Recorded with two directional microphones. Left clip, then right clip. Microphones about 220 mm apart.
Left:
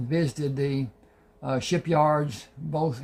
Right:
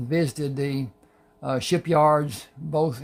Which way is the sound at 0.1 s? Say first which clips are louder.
Right 2 dB; 35° right (ahead or behind).